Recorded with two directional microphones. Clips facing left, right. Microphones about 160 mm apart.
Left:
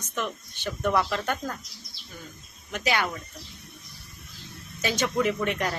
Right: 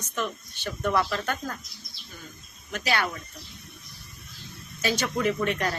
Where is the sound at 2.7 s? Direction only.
15° left (ahead or behind).